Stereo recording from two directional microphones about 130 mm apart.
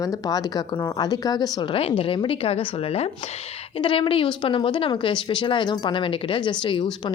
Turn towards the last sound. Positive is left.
turn(degrees=40)  # may be behind; listen again after turning